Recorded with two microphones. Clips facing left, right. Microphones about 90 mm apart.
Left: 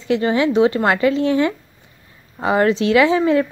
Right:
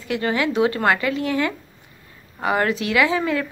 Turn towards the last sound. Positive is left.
turn(degrees=25)  # may be behind; listen again after turning